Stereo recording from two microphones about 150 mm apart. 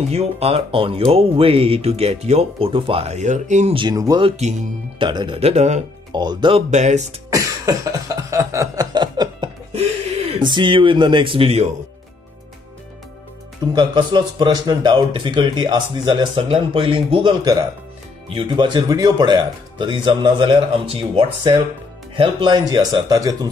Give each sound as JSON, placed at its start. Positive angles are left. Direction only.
{"t": 0.1, "sound": "speech", "side_deg": -45}
{"t": 3.7, "sound": "speech", "side_deg": -30}
{"t": 4.4, "sound": "speech", "side_deg": -50}
{"t": 4.9, "sound": "speech", "side_deg": -35}
{"t": 6.1, "sound": "speech", "side_deg": -30}
{"t": 6.7, "sound": "speech", "side_deg": -50}
{"t": 7.2, "sound": "cough", "side_deg": -20}
{"t": 9.8, "sound": "a sound", "side_deg": -45}
{"t": 10.4, "sound": "speech", "side_deg": -30}
{"t": 13.7, "sound": "speech", "side_deg": -30}